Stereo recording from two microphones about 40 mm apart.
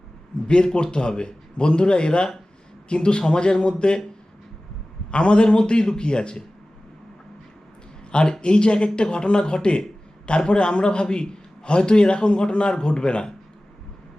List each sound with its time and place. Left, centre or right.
0.4 s a man's voice: left
5.1 s a man's voice: left
8.1 s a man's voice: left